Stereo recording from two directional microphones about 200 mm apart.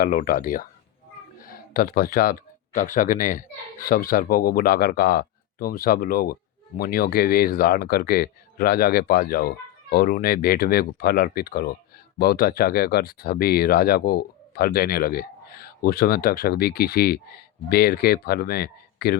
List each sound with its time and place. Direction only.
0.0 s speech: 45° left (ahead or behind)
1.4 s a sound: 45° left (ahead or behind)
2.7 s speech: 40° left (ahead or behind)